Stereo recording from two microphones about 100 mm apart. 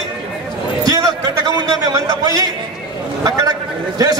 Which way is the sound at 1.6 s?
40° right (ahead or behind).